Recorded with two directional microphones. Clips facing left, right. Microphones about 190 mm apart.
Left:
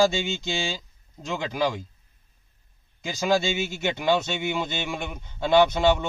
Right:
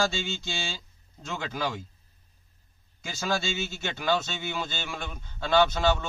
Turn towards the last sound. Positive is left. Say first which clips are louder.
# left 4 dB
turn(degrees=20)  # may be behind; listen again after turning